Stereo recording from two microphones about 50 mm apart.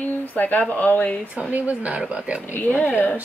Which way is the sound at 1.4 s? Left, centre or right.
Right.